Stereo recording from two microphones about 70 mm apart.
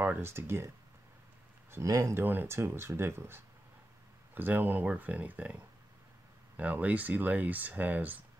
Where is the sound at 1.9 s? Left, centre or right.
Right.